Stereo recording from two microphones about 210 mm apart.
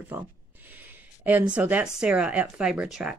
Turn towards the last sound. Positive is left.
turn(degrees=-5)  # may be behind; listen again after turning